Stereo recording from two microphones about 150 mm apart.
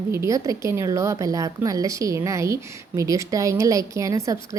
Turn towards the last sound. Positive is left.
turn(degrees=-20)  # may be behind; listen again after turning